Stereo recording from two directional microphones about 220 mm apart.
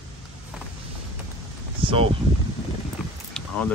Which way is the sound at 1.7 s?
25° right (ahead or behind).